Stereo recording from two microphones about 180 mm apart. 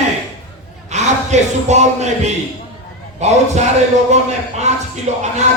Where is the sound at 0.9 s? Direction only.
40° right (ahead or behind).